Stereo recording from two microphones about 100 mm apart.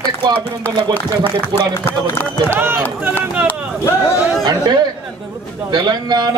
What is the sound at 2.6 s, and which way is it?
Speech, 25° right (ahead or behind).